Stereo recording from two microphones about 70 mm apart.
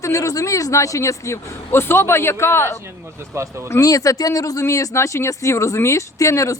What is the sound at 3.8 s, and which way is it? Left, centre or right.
A man's voice, left.